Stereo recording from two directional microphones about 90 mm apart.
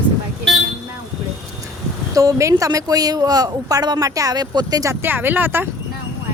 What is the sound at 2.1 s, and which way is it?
Speech, 40° right (ahead or behind).